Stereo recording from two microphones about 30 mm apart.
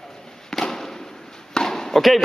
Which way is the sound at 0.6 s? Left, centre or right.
Centre.